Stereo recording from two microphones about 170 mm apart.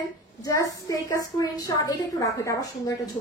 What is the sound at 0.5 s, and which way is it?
A woman's voice, 20° left (ahead or behind).